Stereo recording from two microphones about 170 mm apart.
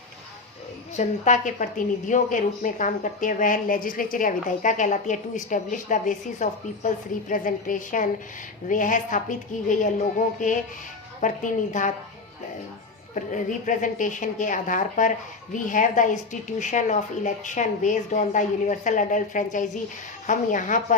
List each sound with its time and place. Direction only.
0.9 s a woman's voice: 45° left (ahead or behind)
13.1 s a woman's voice: 50° left (ahead or behind)